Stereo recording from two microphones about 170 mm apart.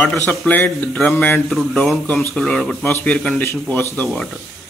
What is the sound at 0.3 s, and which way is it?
A man's voice, 5° left (ahead or behind).